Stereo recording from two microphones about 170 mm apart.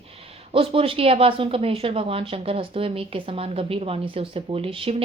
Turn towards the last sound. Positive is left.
turn(degrees=-35)  # may be behind; listen again after turning